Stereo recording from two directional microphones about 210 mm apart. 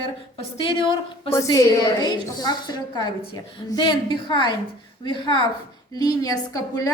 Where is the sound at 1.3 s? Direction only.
15° left (ahead or behind).